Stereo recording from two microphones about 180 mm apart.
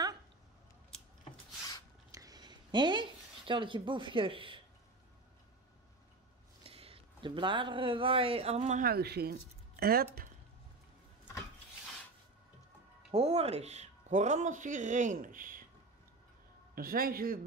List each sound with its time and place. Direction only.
2.0 s a sound: 20° right (ahead or behind)
6.6 s speech: 30° right (ahead or behind)
8.8 s speech: 60° right (ahead or behind)
13.1 s speech: 35° right (ahead or behind)
16.7 s a man's voice: 55° right (ahead or behind)